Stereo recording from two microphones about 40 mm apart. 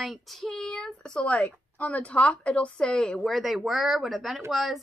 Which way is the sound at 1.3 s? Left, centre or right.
Left.